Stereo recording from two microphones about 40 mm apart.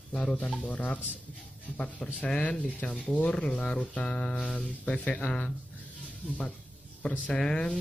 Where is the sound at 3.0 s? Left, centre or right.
Left.